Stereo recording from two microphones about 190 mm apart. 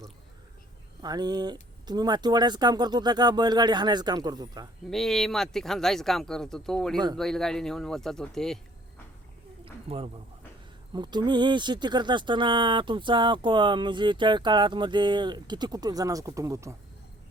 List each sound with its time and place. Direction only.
1.0 s speech: 20° right (ahead or behind)
4.9 s speech: centre (ahead or behind)
9.9 s a man's voice: 30° right (ahead or behind); by 16.7 s 15° right (ahead or behind)